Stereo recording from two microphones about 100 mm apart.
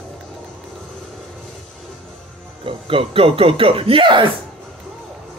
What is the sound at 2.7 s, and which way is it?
A man's voice, 65° right (ahead or behind).